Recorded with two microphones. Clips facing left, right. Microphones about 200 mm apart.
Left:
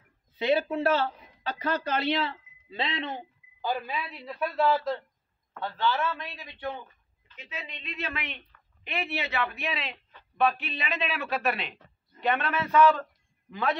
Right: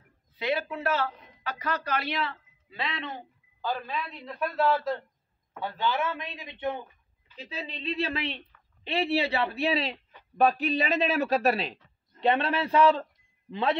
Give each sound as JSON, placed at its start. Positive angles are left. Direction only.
{"t": 0.4, "sound": "speech", "side_deg": 25}
{"t": 3.6, "sound": "a man's voice", "side_deg": 10}
{"t": 5.5, "sound": "a man's voice", "side_deg": -15}
{"t": 7.3, "sound": "a man's voice", "side_deg": -35}